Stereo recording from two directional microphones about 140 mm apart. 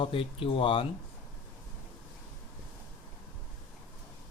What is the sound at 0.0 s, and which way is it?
Speech, 40° left (ahead or behind).